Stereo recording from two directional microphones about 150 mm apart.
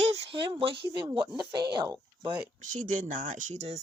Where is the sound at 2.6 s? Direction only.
60° right (ahead or behind).